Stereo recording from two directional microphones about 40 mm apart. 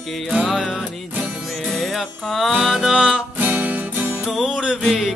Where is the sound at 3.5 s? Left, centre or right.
Right.